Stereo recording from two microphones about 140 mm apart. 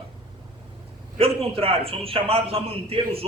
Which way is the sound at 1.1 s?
45° right (ahead or behind).